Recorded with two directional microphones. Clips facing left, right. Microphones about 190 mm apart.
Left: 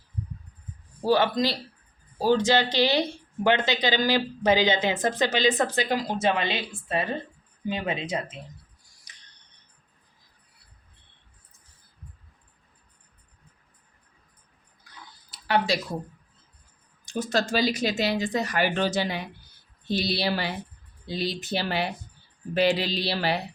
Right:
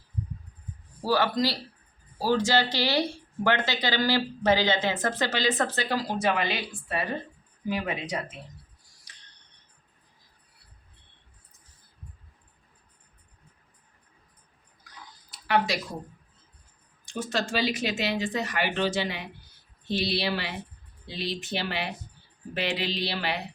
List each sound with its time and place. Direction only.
1.0 s speech: 20° left (ahead or behind)
15.3 s a sound: 30° left (ahead or behind)
17.1 s speech: 40° left (ahead or behind)